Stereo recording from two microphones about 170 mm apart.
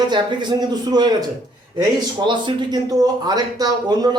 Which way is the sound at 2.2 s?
25° right (ahead or behind).